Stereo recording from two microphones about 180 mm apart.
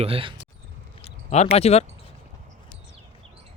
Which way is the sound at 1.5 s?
35° left (ahead or behind).